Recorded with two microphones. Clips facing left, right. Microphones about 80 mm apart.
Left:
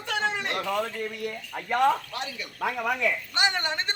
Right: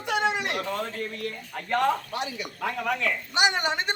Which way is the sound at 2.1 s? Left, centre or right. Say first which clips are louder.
Right 3 dB; right.